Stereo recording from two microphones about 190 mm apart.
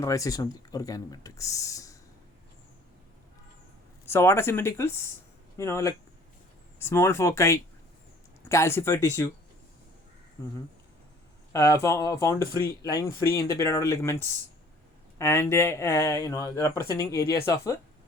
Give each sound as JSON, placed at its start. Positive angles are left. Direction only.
{"t": 0.0, "sound": "speech", "side_deg": 15}
{"t": 4.0, "sound": "speech", "side_deg": 10}
{"t": 11.5, "sound": "speech", "side_deg": 15}